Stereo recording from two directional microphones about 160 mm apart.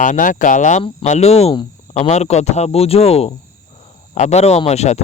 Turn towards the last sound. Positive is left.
turn(degrees=45)  # may be behind; listen again after turning